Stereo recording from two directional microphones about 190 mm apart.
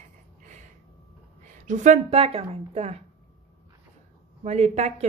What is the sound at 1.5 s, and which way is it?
A woman's voice, 40° right (ahead or behind).